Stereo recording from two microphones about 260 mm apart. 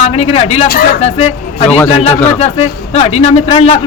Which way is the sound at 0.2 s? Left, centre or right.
Left.